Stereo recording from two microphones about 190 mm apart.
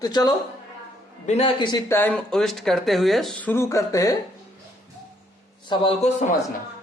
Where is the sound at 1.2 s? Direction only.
30° left (ahead or behind).